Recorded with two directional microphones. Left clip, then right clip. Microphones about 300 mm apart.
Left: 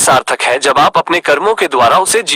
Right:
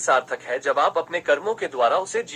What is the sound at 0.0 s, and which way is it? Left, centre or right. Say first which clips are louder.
Speech: left 11 dB; left.